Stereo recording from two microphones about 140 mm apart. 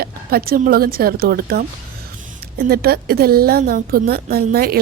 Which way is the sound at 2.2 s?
70° right (ahead or behind).